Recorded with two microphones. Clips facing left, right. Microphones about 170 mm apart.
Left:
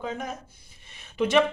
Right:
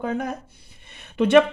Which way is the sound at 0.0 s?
60° right (ahead or behind).